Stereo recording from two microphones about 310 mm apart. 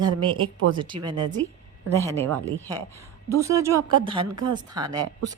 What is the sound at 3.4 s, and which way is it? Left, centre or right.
Speech, centre.